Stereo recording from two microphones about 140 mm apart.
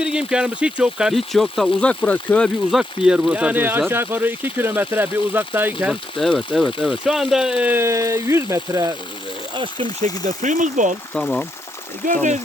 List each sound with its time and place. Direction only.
0.0 s speech: 5° right (ahead or behind); by 2.5 s 10° left (ahead or behind)
2.7 s speech: 5° right (ahead or behind)
5.9 s speech: centre (ahead or behind); by 8.9 s 25° right (ahead or behind)
10.0 s speech: 60° right (ahead or behind)
11.1 s speech: 5° left (ahead or behind)
12.0 s speech: 60° right (ahead or behind)